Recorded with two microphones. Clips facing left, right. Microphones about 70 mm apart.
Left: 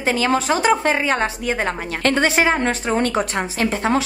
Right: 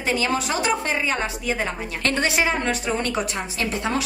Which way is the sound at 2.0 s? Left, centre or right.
Left.